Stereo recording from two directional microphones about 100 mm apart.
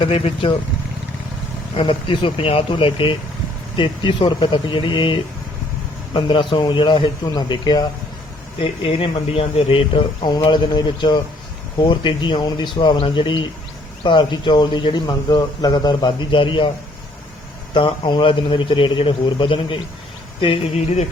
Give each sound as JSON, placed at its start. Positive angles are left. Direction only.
{"t": 0.0, "sound": "speech", "side_deg": 60}
{"t": 1.7, "sound": "speech", "side_deg": 65}
{"t": 8.6, "sound": "speech", "side_deg": 70}
{"t": 17.7, "sound": "speech", "side_deg": 55}